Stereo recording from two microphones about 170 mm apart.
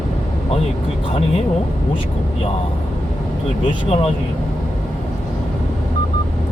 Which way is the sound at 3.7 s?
40° left (ahead or behind).